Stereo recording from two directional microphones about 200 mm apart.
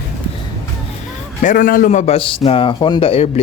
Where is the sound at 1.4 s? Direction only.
45° left (ahead or behind).